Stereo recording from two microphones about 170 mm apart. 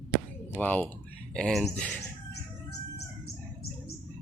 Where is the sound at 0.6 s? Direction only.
10° left (ahead or behind).